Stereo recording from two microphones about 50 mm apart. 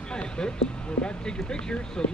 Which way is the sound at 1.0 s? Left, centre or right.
Left.